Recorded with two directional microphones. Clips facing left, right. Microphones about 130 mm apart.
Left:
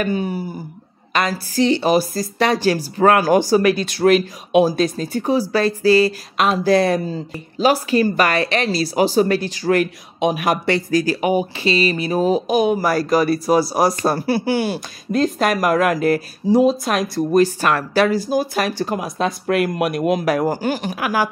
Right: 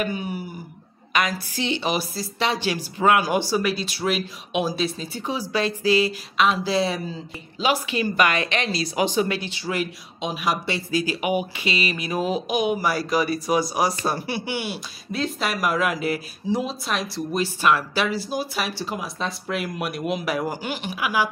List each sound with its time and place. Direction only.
0.0 s speech: 35° left (ahead or behind); by 7.0 s 55° left (ahead or behind)
7.5 s speech: 40° left (ahead or behind)